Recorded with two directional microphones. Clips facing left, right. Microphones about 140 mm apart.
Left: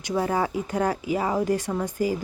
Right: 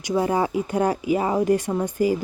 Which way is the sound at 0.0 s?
15° right (ahead or behind).